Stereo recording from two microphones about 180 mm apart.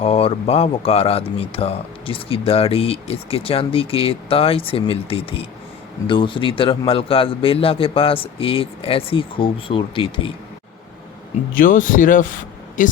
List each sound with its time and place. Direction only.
0.0 s a man's voice: 35° left (ahead or behind)
11.5 s speech: 50° left (ahead or behind)